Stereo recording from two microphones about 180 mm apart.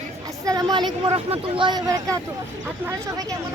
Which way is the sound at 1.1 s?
30° right (ahead or behind).